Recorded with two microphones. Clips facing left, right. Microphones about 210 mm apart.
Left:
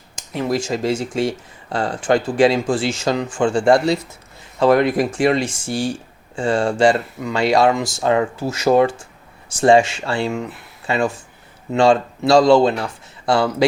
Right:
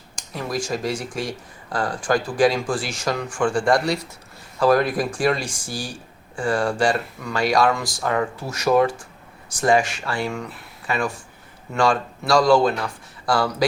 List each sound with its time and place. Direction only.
0.2 s speech: 25° left (ahead or behind)